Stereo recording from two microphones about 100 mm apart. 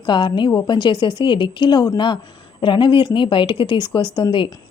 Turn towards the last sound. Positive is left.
turn(degrees=55)  # may be behind; listen again after turning